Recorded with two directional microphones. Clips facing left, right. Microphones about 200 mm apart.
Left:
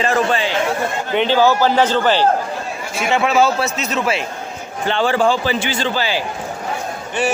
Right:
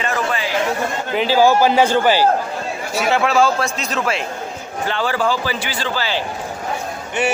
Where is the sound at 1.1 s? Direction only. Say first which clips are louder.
Even; 5° right (ahead or behind).